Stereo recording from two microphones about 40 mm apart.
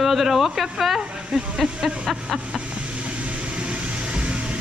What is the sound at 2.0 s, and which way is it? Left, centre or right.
Vehicle, centre.